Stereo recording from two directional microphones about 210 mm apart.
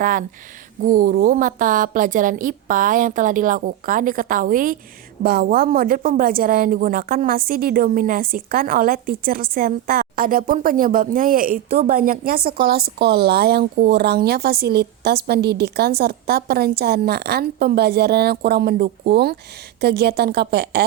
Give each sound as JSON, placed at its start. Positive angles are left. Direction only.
{"t": 0.0, "sound": "a woman's voice", "side_deg": -40}